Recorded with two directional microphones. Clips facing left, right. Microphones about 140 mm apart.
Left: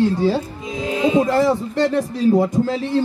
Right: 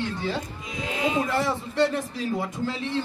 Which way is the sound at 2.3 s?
40° left (ahead or behind).